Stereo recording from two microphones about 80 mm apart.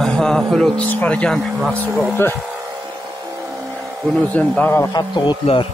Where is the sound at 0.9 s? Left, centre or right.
Centre.